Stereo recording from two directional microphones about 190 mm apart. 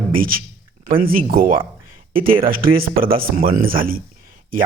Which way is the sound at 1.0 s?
50° right (ahead or behind).